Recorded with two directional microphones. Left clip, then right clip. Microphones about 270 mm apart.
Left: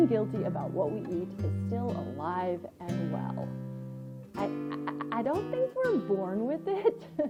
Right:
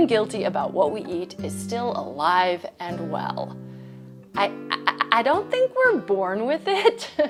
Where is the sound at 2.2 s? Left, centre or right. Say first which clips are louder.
Right 13 dB; centre.